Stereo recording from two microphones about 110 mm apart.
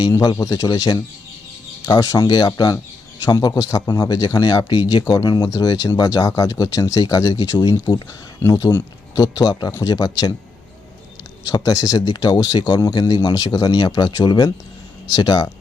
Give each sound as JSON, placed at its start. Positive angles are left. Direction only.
{"t": 0.1, "sound": "speech", "side_deg": 30}
{"t": 11.4, "sound": "speech", "side_deg": 35}